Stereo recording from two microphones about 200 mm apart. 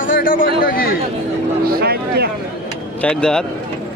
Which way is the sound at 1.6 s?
50° right (ahead or behind).